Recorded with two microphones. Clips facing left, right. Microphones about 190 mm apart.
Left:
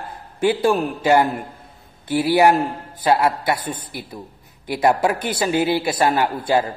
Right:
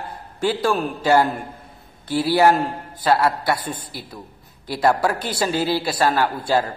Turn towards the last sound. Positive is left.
turn(degrees=15)  # may be behind; listen again after turning